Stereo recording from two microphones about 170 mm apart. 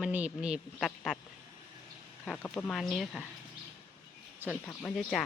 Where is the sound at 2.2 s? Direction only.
5° left (ahead or behind).